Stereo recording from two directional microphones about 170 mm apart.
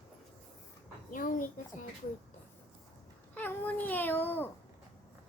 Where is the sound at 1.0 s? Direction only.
55° left (ahead or behind).